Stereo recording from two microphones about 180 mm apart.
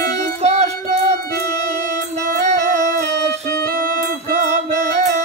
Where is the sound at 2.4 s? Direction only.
40° right (ahead or behind).